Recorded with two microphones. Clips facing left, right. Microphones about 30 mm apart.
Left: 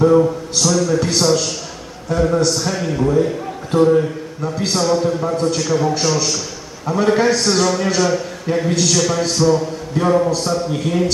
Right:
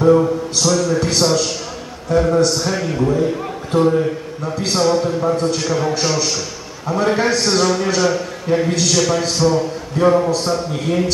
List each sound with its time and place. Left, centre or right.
0.0 s a sound: centre
0.8 s a man's voice: centre
6.9 s a man's voice: centre